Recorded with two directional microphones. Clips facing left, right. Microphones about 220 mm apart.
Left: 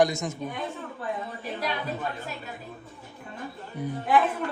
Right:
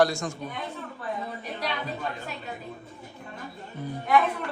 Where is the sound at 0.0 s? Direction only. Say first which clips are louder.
Even; 20° left (ahead or behind).